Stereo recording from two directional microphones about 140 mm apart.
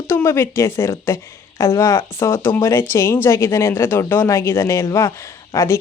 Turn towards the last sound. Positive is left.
turn(degrees=20)  # may be behind; listen again after turning